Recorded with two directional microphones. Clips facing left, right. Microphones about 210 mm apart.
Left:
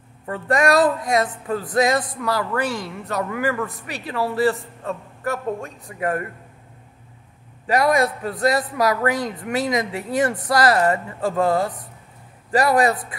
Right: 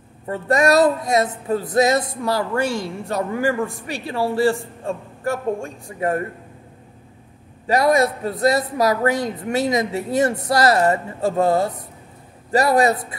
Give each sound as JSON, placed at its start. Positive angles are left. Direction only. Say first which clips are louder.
{"t": 0.3, "sound": "speech", "louder": "right 2 dB", "side_deg": -25}
{"t": 7.6, "sound": "speech", "louder": "right 2 dB", "side_deg": -25}